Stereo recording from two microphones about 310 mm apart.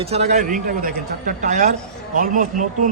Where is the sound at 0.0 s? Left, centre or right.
Centre.